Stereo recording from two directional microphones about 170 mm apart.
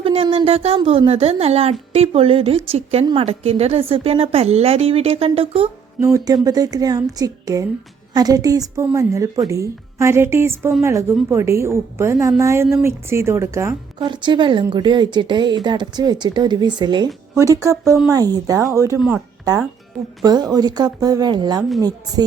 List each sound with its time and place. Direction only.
0.0 s a woman's voice: 35° right (ahead or behind)
6.0 s a woman's voice: 20° right (ahead or behind)
14.1 s speech: 25° right (ahead or behind)
18.9 s a woman's voice: 5° right (ahead or behind)
20.2 s speech: 25° right (ahead or behind)